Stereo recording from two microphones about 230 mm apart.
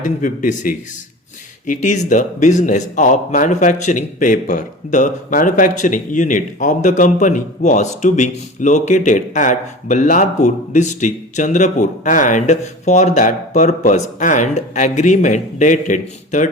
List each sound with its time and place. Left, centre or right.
0.0 s a man's voice: left